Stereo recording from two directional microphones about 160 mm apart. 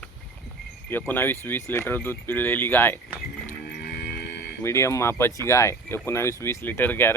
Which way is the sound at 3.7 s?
90° left.